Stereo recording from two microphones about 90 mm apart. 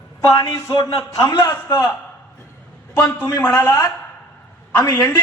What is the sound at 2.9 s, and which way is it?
Speech, 25° left (ahead or behind).